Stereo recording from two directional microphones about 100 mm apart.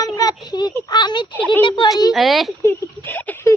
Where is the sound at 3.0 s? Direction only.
20° left (ahead or behind).